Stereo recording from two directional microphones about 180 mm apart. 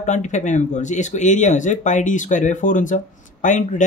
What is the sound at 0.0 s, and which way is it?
Speech, 40° left (ahead or behind).